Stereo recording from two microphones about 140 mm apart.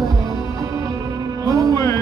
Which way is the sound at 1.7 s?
20° left (ahead or behind).